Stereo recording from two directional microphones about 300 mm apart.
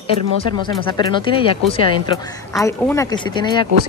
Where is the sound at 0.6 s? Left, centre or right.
Centre.